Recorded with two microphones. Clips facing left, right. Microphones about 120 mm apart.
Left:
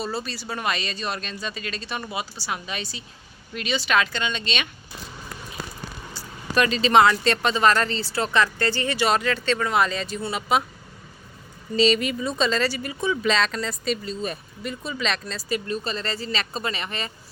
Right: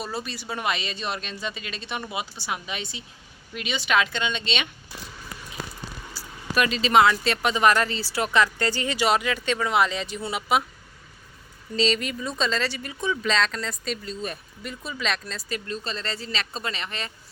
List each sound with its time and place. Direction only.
0.0 s speech: 15° right (ahead or behind)
6.1 s speech: 5° right (ahead or behind)
11.8 s speech: 5° left (ahead or behind)